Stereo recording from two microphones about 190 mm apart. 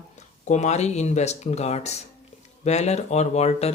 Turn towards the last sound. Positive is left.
turn(degrees=35)  # may be behind; listen again after turning